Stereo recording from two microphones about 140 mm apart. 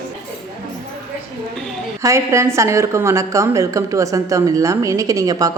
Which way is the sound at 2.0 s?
20° right (ahead or behind).